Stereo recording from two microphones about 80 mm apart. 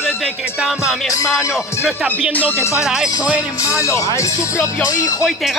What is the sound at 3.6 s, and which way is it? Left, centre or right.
Speech, left.